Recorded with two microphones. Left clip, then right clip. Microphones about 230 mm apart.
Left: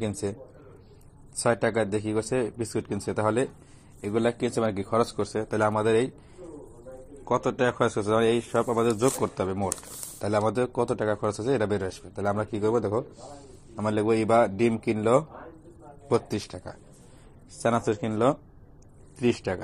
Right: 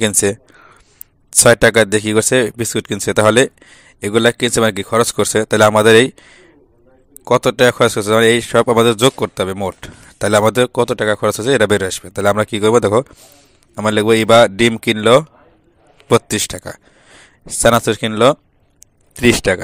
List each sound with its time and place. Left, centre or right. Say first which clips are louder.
0.0 s speech: right 16 dB; right
1.4 s speech: right 15 dB; right
7.2 s speech: right 13 dB; right
16.3 s speech: right 14 dB; right